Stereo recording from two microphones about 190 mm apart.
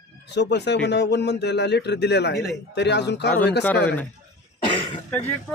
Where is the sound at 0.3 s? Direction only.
65° left (ahead or behind).